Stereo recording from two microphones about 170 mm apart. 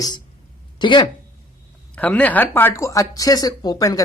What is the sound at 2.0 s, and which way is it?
Speech, 10° left (ahead or behind).